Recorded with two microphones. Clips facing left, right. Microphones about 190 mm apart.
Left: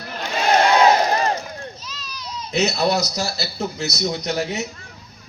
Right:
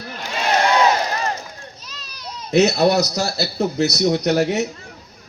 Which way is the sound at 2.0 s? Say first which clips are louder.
Right 3 dB; 55° right (ahead or behind).